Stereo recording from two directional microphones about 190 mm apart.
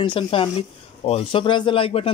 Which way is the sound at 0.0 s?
25° left (ahead or behind).